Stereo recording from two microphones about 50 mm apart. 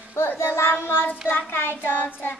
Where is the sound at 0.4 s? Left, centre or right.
Left.